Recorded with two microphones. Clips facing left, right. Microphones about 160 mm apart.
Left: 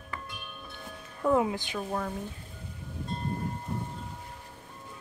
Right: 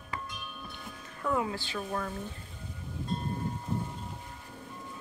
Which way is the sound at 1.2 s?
25° left (ahead or behind).